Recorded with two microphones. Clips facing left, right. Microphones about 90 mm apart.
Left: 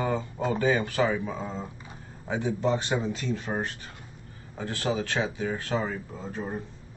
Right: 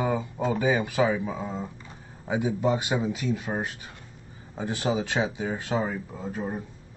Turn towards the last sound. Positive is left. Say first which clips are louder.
# right 2 dB
turn(degrees=-10)  # may be behind; listen again after turning